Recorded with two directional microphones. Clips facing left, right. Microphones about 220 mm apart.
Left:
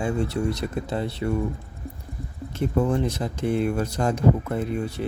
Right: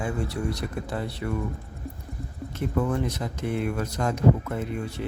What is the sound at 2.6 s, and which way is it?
Speech, 30° left (ahead or behind).